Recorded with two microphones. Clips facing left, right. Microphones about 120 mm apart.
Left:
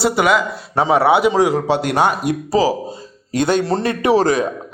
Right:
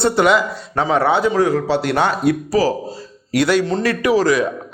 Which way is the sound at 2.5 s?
25° left (ahead or behind).